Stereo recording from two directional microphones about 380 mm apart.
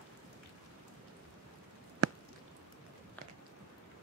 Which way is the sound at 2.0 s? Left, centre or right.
Right.